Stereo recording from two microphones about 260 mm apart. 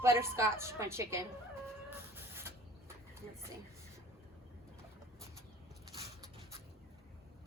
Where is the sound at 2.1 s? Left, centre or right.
Centre.